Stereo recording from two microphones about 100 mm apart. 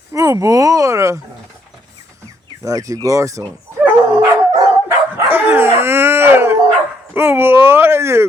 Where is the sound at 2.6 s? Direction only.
35° right (ahead or behind).